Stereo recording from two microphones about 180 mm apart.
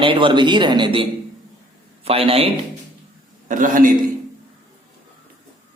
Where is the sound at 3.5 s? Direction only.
45° right (ahead or behind).